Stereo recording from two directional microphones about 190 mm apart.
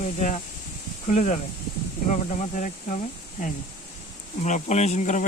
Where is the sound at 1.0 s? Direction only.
40° left (ahead or behind).